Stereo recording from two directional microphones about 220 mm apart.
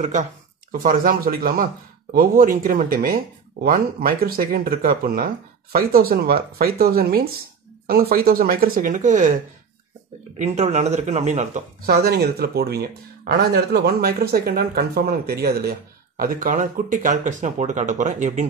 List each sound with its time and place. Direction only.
0.0 s speech: 35° right (ahead or behind)
10.4 s speech: 30° right (ahead or behind)